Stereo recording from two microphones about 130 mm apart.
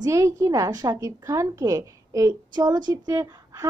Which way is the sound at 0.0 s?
25° right (ahead or behind).